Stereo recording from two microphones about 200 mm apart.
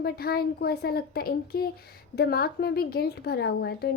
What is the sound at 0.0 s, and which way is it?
A woman's voice, 50° left (ahead or behind).